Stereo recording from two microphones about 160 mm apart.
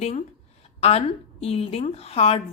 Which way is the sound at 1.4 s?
40° left (ahead or behind).